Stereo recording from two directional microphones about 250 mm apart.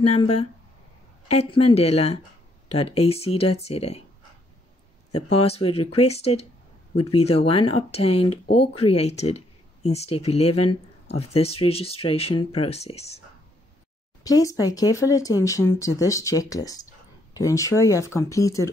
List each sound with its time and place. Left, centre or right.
0.0 s speech: left
5.1 s speech: left
14.2 s speech: centre